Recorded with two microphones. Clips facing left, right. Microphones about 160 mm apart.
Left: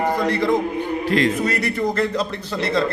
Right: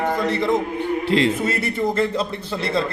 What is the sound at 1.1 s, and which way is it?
Speech, 25° right (ahead or behind).